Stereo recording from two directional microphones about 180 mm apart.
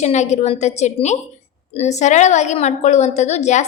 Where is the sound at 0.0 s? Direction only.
40° left (ahead or behind).